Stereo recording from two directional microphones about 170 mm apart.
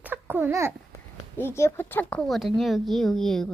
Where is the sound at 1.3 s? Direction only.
15° left (ahead or behind).